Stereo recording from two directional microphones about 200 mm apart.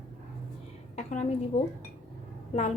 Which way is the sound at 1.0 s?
35° left (ahead or behind).